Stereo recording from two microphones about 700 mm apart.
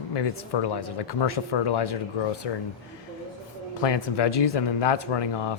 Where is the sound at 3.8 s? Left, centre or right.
Left.